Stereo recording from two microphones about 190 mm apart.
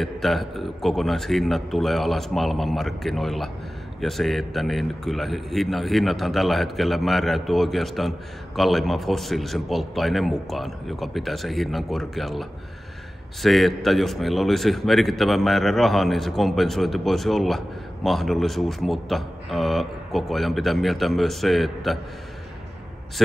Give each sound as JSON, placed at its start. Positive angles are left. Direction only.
{"t": 0.0, "sound": "a man's voice", "side_deg": 0}